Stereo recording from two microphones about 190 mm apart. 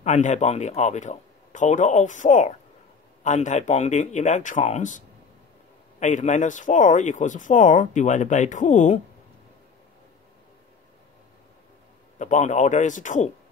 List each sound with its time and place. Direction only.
0.0 s speech: 40° left (ahead or behind)
12.2 s speech: 40° left (ahead or behind)